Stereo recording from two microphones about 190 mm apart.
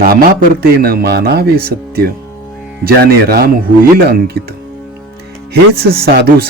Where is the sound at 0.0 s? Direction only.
50° right (ahead or behind).